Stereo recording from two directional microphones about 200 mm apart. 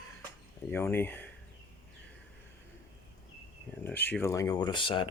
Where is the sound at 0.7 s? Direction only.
10° left (ahead or behind).